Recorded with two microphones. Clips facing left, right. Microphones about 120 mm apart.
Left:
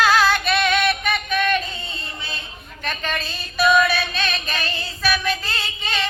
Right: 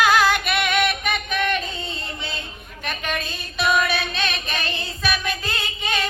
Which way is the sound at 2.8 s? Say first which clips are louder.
Left 1 dB; 15° right (ahead or behind).